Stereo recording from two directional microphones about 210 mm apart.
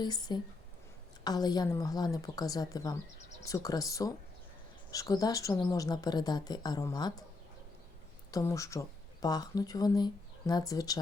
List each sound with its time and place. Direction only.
0.0 s a woman's voice: 20° left (ahead or behind)
8.3 s speech: 15° left (ahead or behind)